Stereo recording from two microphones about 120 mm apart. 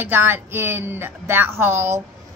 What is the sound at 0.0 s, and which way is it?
A woman's voice, 15° right (ahead or behind).